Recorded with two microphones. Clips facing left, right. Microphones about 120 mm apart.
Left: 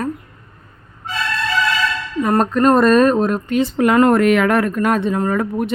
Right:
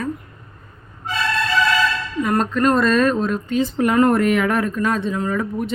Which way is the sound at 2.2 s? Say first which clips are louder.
Left 4 dB; 45° left (ahead or behind).